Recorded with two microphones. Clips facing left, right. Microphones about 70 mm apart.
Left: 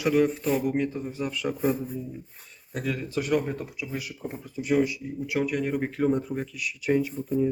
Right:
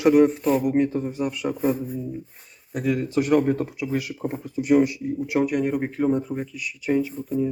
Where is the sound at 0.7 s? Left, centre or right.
Right.